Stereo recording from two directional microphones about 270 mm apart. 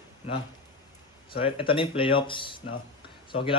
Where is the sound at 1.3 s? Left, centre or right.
Centre.